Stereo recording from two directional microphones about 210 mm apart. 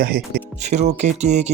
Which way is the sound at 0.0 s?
45° right (ahead or behind).